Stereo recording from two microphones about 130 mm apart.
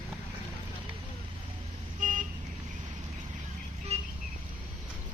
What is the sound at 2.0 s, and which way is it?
Vehicle, 85° right.